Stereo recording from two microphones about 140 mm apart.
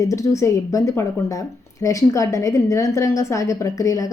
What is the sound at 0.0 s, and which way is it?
A woman's voice, 25° left (ahead or behind).